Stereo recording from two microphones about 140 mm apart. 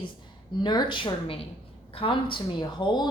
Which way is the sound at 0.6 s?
30° left (ahead or behind).